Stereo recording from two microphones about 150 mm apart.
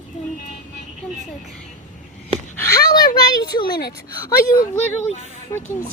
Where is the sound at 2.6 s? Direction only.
20° left (ahead or behind).